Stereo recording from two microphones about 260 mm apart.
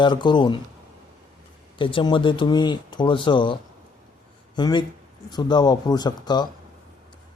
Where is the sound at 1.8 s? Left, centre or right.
Centre.